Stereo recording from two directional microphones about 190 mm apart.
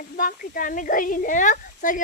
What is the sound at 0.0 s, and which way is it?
A woman's voice, 50° left (ahead or behind).